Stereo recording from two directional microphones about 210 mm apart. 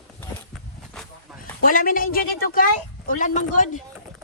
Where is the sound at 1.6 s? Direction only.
40° left (ahead or behind).